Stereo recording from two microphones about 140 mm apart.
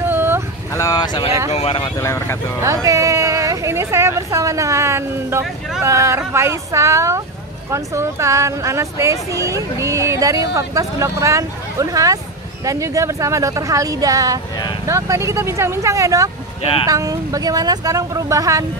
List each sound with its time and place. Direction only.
0.0 s a sound: 15° right (ahead or behind)
0.7 s speech: 25° left (ahead or behind)
1.5 s speech: 45° left (ahead or behind)
2.0 s speech: 20° left (ahead or behind)
2.6 s speech: 25° right (ahead or behind)